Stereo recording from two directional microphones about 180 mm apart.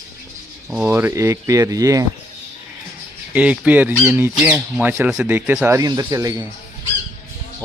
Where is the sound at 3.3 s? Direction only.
5° right (ahead or behind).